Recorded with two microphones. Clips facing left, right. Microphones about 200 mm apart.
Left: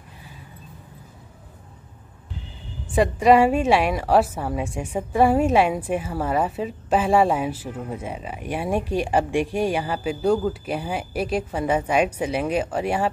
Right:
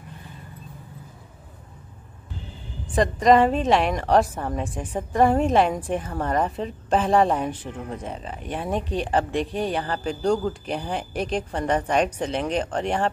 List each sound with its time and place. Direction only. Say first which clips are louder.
2.9 s a woman's voice: left 1 dB; 10° left (ahead or behind)